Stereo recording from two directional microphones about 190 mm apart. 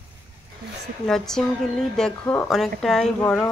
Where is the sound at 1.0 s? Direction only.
Centre (ahead or behind).